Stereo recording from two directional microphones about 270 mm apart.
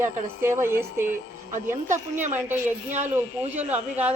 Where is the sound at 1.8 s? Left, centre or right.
Right.